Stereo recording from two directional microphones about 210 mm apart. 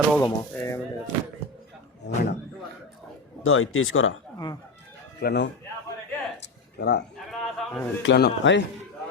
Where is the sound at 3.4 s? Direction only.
75° left (ahead or behind).